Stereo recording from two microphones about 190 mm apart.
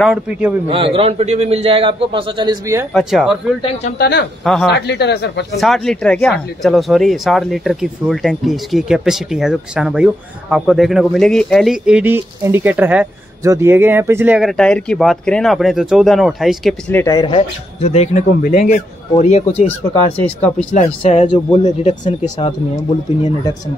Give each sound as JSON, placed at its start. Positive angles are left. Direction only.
{"t": 0.0, "sound": "speech", "side_deg": -5}
{"t": 0.7, "sound": "a man's voice", "side_deg": -30}
{"t": 2.9, "sound": "speech", "side_deg": 0}
{"t": 4.0, "sound": "speech", "side_deg": 60}
{"t": 5.6, "sound": "speech", "side_deg": 0}
{"t": 14.6, "sound": "speech", "side_deg": 5}
{"t": 16.9, "sound": "speech", "side_deg": 15}
{"t": 20.7, "sound": "speech", "side_deg": 40}